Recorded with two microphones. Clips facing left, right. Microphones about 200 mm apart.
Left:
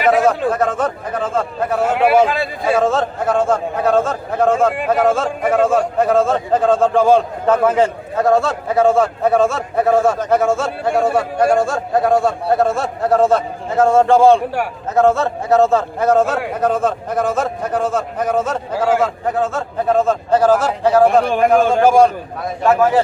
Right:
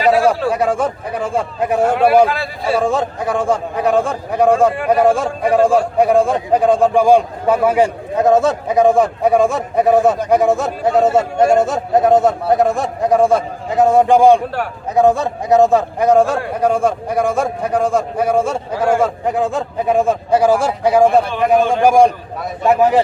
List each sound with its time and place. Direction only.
0.5 s a man's voice: 10° right (ahead or behind)
2.0 s a man's voice: 15° left (ahead or behind)
2.8 s a man's voice: 15° right (ahead or behind)